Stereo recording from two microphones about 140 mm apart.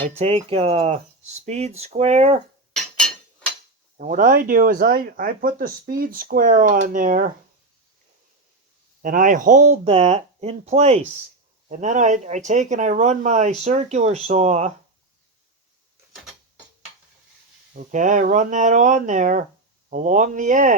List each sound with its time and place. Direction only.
0.2 s speech: 45° right (ahead or behind)
3.9 s speech: 70° right (ahead or behind)
9.0 s speech: 75° right (ahead or behind)
9.8 s speech: 50° right (ahead or behind)
17.7 s speech: 65° right (ahead or behind)